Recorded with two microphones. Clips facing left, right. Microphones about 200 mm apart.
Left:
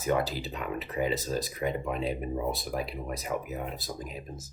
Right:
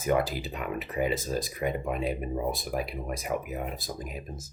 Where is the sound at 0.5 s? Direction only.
10° right (ahead or behind).